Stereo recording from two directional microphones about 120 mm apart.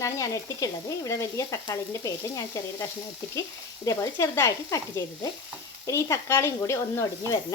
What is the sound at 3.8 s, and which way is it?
Speech, 25° left (ahead or behind).